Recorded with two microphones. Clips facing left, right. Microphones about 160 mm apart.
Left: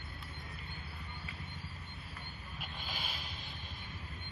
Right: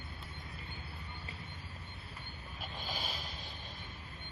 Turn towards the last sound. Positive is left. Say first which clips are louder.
# right 3 dB
turn(degrees=-40)  # may be behind; listen again after turning